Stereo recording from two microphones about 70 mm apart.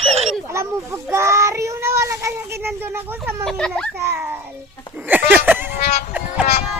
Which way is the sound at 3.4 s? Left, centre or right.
Centre.